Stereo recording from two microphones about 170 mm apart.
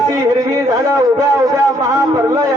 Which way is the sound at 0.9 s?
20° right (ahead or behind).